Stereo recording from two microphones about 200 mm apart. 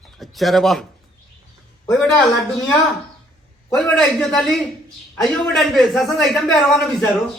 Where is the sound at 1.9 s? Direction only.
5° left (ahead or behind).